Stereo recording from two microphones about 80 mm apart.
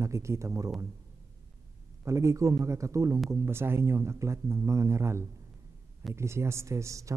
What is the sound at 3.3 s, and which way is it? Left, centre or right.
Speech, right.